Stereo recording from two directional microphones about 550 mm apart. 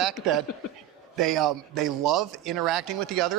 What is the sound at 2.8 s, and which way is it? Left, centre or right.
Speech, right.